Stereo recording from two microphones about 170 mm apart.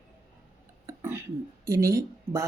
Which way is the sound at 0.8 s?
15° right (ahead or behind).